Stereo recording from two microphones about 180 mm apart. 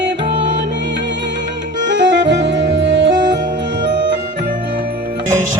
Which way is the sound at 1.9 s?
80° right.